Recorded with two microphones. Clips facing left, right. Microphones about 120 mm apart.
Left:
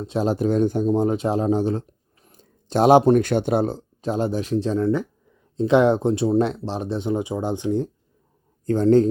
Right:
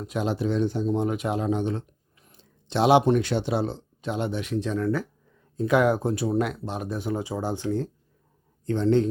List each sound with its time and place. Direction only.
0.0 s speech: 30° left (ahead or behind)
8.6 s speech: 40° left (ahead or behind)